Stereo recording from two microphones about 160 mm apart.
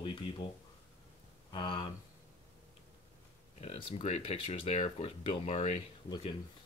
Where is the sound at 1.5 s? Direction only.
30° left (ahead or behind).